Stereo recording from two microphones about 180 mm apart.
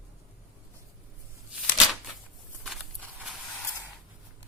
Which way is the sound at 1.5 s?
5° right (ahead or behind).